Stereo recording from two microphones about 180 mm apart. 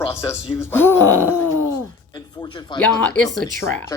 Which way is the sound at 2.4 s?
25° left (ahead or behind).